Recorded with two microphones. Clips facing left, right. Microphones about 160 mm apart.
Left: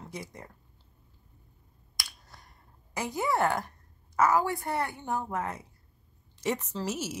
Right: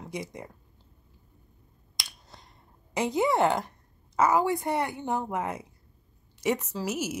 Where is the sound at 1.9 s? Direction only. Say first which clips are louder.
Right 1 dB; 20° right (ahead or behind).